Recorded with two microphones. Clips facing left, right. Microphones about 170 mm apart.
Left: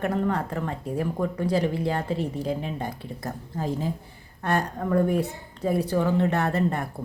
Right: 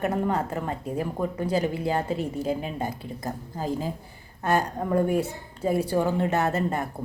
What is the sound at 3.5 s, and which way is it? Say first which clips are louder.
A woman's voice: left 1 dB; 40° right (ahead or behind).